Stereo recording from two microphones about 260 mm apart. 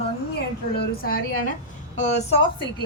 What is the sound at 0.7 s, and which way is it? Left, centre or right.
A woman's voice, left.